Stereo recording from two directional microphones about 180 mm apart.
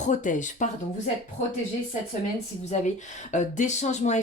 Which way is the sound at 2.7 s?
40° left (ahead or behind).